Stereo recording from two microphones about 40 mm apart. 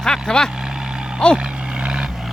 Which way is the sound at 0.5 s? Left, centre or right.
Centre.